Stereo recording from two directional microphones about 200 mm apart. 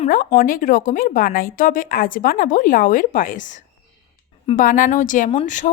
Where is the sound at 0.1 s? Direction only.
45° left (ahead or behind).